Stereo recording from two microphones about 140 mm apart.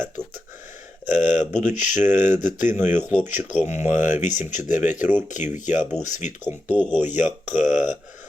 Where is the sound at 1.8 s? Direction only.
60° left (ahead or behind).